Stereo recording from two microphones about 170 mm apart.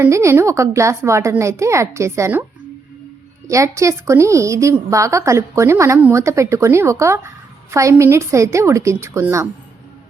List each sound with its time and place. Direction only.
0.0 s a woman's voice: 15° right (ahead or behind)
3.4 s a woman's voice: 20° right (ahead or behind)